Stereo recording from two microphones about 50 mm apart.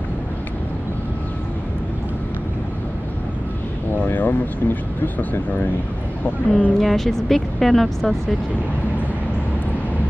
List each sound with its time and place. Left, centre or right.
4.1 s speech: left
6.8 s speech: centre